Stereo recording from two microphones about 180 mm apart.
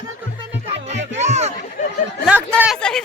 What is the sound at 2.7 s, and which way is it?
Speech, 5° left (ahead or behind).